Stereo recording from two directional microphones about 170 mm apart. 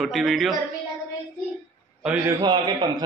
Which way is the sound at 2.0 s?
10° right (ahead or behind).